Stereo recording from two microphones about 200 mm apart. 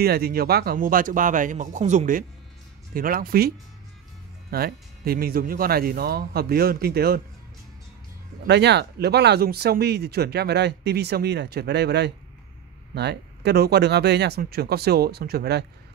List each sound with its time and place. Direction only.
0.0 s speech: 50° right (ahead or behind)
8.5 s speech: 60° right (ahead or behind)